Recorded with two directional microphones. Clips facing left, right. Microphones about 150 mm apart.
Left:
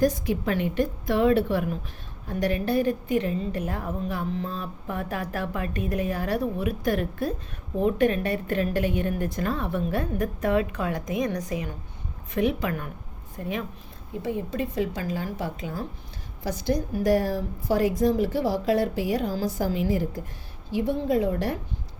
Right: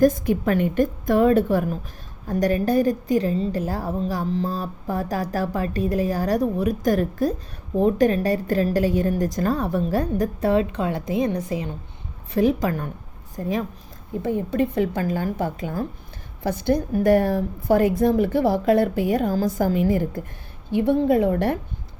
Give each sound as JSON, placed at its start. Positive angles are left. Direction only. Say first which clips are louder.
{"t": 0.0, "sound": "a woman's voice", "louder": "right 5 dB", "side_deg": -50}
{"t": 14.2, "sound": "a woman's voice", "louder": "right 6 dB", "side_deg": -55}